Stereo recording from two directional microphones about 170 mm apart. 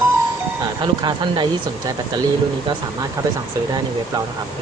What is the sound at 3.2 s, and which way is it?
Speech, 20° right (ahead or behind).